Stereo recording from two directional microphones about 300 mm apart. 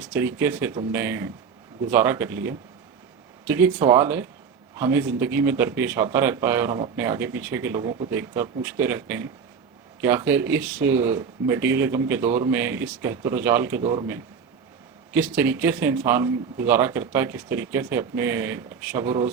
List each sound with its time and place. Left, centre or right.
0.1 s a man's voice: centre